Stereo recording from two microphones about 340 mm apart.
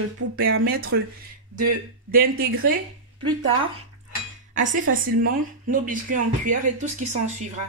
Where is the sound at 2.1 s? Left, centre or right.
Right.